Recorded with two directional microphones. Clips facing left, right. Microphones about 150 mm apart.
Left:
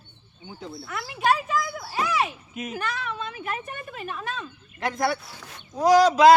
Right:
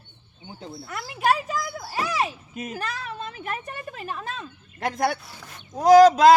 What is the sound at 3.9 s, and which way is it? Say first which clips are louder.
Speech: left 2 dB; 35° right (ahead or behind).